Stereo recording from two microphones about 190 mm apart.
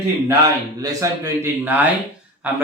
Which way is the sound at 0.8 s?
15° right (ahead or behind).